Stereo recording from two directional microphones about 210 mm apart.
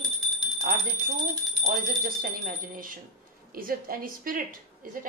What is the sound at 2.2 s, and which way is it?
A woman's voice, 45° right (ahead or behind).